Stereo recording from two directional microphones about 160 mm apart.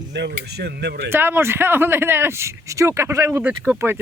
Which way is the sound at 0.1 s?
90° right.